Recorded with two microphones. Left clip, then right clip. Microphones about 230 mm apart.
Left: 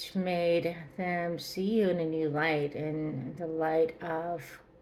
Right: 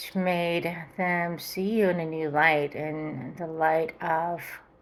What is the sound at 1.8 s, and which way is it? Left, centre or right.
Speech, right.